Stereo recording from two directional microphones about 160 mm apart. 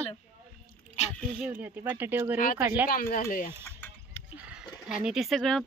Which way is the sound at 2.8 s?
65° left (ahead or behind).